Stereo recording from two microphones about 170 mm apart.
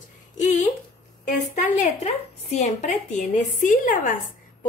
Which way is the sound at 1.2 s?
45° left (ahead or behind).